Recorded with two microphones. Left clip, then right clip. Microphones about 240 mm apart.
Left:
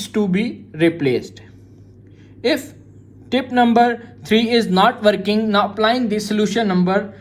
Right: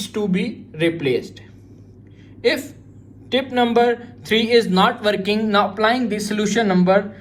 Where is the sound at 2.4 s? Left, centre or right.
Left.